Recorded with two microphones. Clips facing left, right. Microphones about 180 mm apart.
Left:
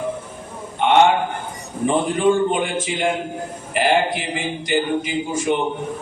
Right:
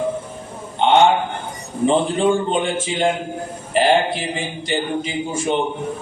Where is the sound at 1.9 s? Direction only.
30° right (ahead or behind).